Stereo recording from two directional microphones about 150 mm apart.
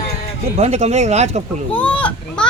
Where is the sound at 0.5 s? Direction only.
45° right (ahead or behind).